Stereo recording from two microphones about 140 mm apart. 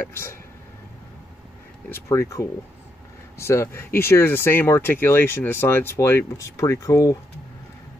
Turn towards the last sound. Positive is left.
turn(degrees=25)  # may be behind; listen again after turning